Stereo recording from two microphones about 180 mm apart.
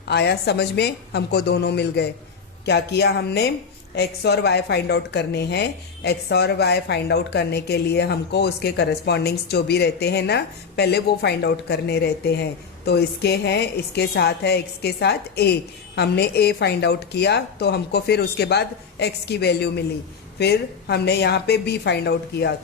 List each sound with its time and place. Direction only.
0.1 s a woman's voice: 70° left (ahead or behind)